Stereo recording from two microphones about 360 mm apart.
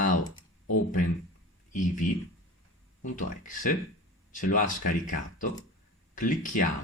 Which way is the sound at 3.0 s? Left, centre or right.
Left.